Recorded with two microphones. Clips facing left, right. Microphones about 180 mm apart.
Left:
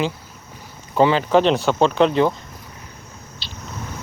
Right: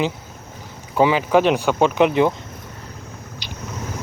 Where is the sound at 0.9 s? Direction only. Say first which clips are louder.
Even; 10° right (ahead or behind).